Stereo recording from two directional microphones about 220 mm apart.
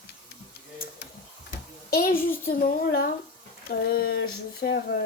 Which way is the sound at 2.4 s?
45° left (ahead or behind).